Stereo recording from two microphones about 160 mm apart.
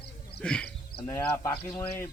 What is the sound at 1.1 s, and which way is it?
Speech, 15° left (ahead or behind).